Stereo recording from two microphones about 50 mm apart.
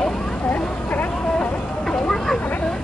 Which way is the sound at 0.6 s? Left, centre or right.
Left.